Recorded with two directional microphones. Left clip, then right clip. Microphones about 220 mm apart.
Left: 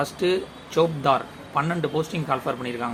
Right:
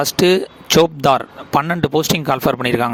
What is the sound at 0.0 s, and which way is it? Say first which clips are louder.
Speech: right 9 dB; 55° right (ahead or behind).